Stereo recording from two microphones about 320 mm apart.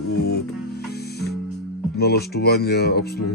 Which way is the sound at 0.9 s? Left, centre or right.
Left.